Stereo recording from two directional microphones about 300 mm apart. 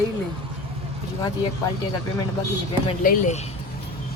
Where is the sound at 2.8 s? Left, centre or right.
Left.